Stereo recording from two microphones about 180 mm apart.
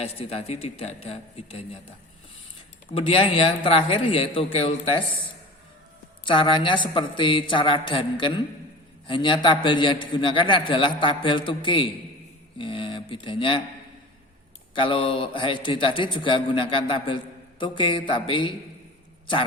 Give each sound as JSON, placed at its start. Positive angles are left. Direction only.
{"t": 0.0, "sound": "a man's voice", "side_deg": 35}
{"t": 2.9, "sound": "a man's voice", "side_deg": 30}
{"t": 6.2, "sound": "a man's voice", "side_deg": 25}
{"t": 12.5, "sound": "a sound", "side_deg": 30}
{"t": 14.8, "sound": "a man's voice", "side_deg": 30}